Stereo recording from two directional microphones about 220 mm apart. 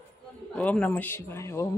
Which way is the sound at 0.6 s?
5° left (ahead or behind).